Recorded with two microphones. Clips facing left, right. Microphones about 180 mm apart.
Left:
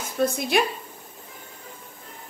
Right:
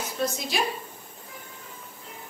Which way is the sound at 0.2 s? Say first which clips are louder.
Left 6 dB; 60° left (ahead or behind).